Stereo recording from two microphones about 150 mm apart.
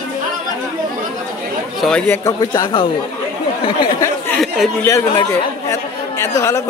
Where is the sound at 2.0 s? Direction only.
20° left (ahead or behind).